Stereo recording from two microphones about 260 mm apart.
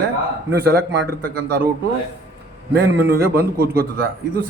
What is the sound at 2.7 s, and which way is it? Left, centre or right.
A man's voice, right.